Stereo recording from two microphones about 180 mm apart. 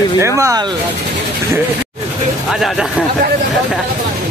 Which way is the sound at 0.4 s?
20° right (ahead or behind).